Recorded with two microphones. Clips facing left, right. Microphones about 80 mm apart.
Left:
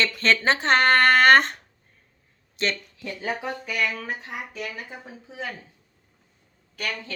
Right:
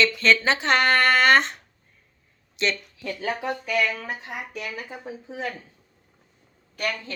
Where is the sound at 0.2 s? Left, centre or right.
Left.